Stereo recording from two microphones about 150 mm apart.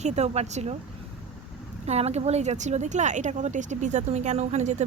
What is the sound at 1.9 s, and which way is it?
Speech, 45° right (ahead or behind).